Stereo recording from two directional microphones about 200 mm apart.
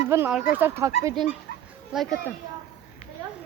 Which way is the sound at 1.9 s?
5° right (ahead or behind).